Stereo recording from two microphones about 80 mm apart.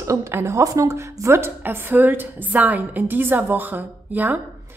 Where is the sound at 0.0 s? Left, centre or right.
Right.